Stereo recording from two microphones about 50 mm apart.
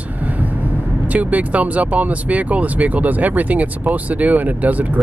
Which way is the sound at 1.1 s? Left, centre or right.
Right.